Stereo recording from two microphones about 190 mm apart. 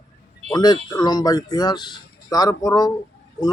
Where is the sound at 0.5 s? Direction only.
20° left (ahead or behind).